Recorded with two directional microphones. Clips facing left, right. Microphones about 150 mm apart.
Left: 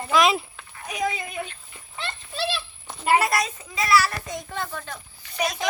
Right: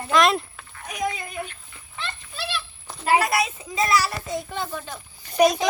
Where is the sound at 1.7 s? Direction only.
25° left (ahead or behind).